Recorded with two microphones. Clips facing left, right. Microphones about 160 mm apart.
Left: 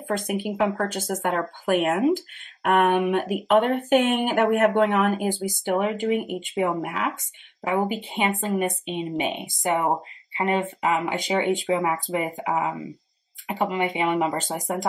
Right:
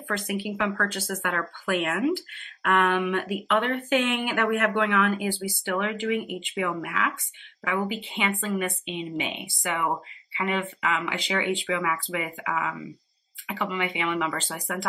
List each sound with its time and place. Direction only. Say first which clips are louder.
0.3 s speech: left 4 dB; 50° left (ahead or behind)